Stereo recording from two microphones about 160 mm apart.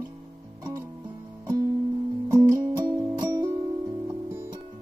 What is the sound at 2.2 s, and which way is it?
Music, 15° right (ahead or behind).